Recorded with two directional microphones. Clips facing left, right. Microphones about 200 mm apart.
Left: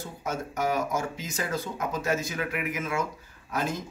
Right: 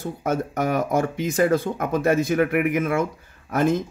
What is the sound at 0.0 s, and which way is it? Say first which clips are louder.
Speech: right 8 dB; 55° right (ahead or behind).